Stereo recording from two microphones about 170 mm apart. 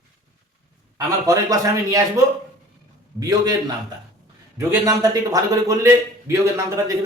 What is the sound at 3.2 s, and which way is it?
Speech, 20° right (ahead or behind).